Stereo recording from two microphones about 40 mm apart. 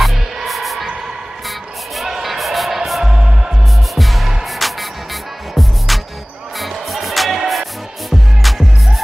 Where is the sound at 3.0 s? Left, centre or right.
Centre.